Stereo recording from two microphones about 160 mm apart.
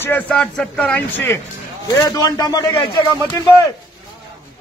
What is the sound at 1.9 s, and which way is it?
Speech, 25° left (ahead or behind).